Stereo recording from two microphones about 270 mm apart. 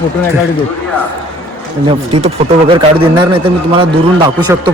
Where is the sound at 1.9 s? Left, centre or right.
Centre.